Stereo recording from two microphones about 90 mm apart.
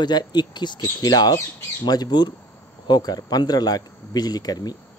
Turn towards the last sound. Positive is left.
turn(degrees=45)  # may be behind; listen again after turning